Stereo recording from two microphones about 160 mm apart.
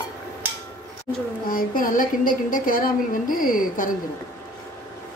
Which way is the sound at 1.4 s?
60° left (ahead or behind).